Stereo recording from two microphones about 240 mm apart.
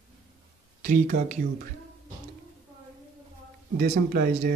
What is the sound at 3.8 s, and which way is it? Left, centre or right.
Mantra, right.